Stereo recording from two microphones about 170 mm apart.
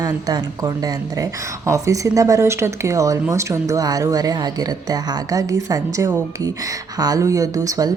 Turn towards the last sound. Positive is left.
turn(degrees=-20)  # may be behind; listen again after turning